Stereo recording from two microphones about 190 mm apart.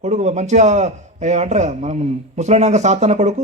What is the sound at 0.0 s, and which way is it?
A man's voice, 35° right (ahead or behind).